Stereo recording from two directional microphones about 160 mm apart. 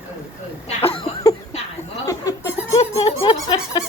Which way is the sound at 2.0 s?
20° left (ahead or behind).